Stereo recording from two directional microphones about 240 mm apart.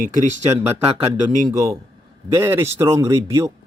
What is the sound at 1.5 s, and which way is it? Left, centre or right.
Speech, centre.